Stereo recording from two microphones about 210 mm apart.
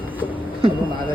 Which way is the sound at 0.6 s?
25° right (ahead or behind).